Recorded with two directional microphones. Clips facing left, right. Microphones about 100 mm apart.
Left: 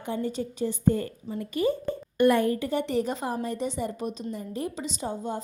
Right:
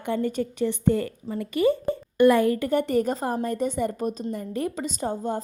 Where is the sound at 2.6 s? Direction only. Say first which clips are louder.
Right 4 dB; 50° right (ahead or behind).